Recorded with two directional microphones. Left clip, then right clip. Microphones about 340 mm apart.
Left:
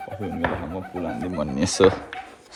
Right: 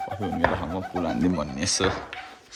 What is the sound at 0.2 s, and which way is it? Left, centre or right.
Speech, centre.